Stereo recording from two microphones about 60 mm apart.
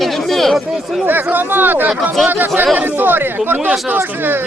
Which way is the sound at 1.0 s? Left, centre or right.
Right.